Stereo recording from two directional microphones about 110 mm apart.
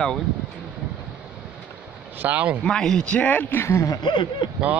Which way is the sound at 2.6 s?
5° left (ahead or behind).